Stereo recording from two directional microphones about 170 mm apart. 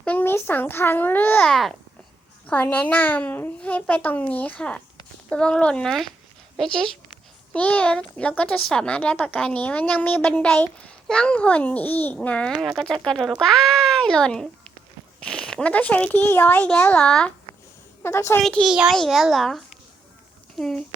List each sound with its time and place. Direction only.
0.0 s a child's voice: 10° left (ahead or behind)
18.4 s speech: centre (ahead or behind)